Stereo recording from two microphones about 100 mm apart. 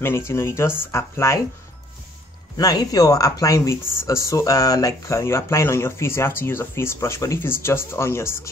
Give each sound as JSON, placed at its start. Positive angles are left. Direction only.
{"t": 0.0, "sound": "speech", "side_deg": 25}
{"t": 2.5, "sound": "speech", "side_deg": 40}